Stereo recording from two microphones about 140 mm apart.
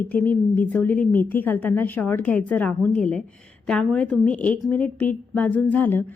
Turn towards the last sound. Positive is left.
turn(degrees=15)  # may be behind; listen again after turning